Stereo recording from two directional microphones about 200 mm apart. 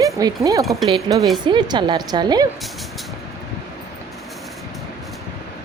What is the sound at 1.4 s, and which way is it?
A woman's voice, 25° right (ahead or behind).